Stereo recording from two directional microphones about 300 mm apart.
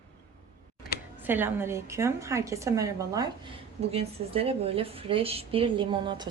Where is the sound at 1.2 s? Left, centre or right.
Centre.